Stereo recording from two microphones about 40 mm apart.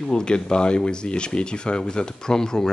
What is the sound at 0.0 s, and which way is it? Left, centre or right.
Speech, centre.